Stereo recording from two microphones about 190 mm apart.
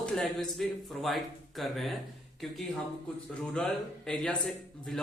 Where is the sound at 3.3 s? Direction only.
5° left (ahead or behind).